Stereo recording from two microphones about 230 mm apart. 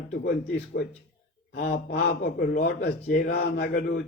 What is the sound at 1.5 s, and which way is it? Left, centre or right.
A man's voice, left.